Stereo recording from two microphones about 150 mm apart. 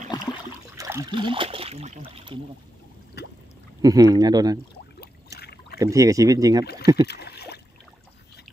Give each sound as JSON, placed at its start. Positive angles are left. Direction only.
{"t": 0.1, "sound": "a sound", "side_deg": 25}
{"t": 0.7, "sound": "splash", "side_deg": -20}
{"t": 1.1, "sound": "speech", "side_deg": -35}
{"t": 3.8, "sound": "speech", "side_deg": -25}
{"t": 5.4, "sound": "rowboat", "side_deg": 90}
{"t": 5.8, "sound": "speech", "side_deg": -20}
{"t": 6.6, "sound": "speech", "side_deg": 90}
{"t": 7.1, "sound": "a sound", "side_deg": 90}